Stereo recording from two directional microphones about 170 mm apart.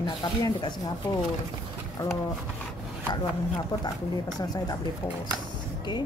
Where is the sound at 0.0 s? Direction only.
25° left (ahead or behind).